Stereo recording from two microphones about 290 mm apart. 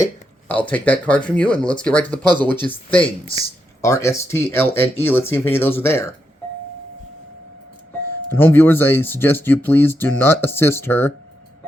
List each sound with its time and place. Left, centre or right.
0.0 s speech: centre
2.3 s speech: centre
3.2 s speech: centre
8.3 s speech: centre